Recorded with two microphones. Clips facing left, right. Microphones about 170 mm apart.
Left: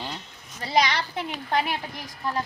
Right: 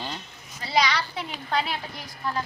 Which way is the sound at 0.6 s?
50° left (ahead or behind).